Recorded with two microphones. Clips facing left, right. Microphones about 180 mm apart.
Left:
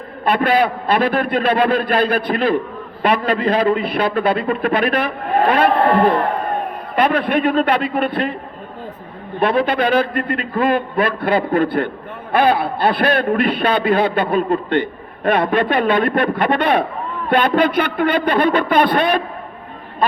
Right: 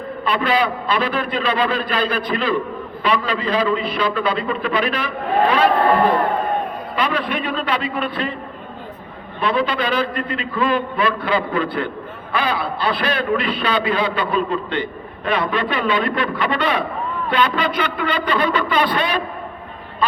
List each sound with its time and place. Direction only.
0.3 s a man's voice: 55° left (ahead or behind)
9.4 s a man's voice: 55° left (ahead or behind)